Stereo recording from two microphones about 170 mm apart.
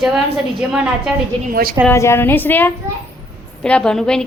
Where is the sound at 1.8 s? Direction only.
15° left (ahead or behind).